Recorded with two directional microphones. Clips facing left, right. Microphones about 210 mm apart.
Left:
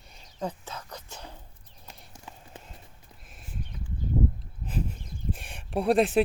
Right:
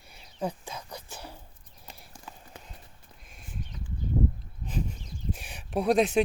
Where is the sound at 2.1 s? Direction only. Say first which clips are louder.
Left 2 dB; 25° left (ahead or behind).